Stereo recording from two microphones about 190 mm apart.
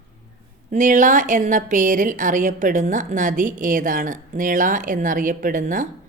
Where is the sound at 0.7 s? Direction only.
40° right (ahead or behind).